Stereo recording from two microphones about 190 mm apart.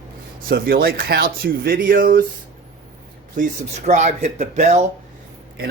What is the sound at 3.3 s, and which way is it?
Speech, 40° right (ahead or behind).